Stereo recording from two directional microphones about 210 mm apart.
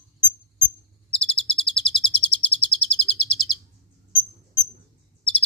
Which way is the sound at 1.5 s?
5° left (ahead or behind).